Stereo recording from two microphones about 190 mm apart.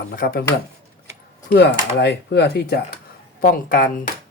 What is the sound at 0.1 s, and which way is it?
Speech, 50° left (ahead or behind).